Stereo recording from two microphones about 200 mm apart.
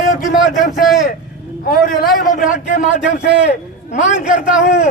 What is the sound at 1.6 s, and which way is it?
A man's voice, 45° left (ahead or behind).